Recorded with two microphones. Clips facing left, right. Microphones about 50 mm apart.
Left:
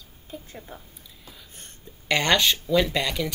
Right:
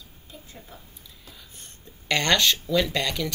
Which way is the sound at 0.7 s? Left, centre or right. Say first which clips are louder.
Left 5 dB; left.